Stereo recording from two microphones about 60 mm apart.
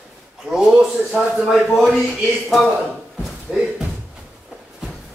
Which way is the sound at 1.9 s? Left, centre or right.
Centre.